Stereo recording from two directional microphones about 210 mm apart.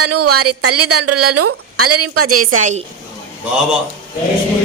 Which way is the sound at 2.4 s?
35° right (ahead or behind).